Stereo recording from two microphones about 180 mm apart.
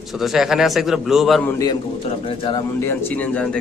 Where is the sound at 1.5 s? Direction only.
20° left (ahead or behind).